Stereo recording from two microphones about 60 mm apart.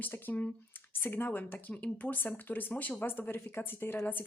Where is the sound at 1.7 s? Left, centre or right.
Left.